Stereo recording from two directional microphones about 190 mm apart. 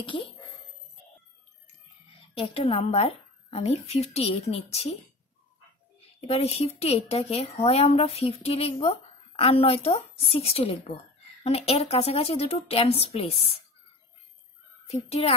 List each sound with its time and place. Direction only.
0.0 s speech: 30° left (ahead or behind)
2.3 s speech: 30° left (ahead or behind)
14.9 s speech: 30° left (ahead or behind)